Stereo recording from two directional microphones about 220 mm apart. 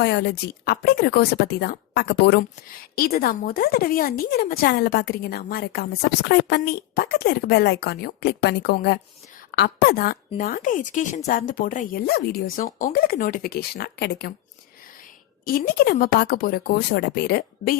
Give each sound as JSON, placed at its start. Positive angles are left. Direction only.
{"t": 0.0, "sound": "speech", "side_deg": 50}
{"t": 15.4, "sound": "speech", "side_deg": 40}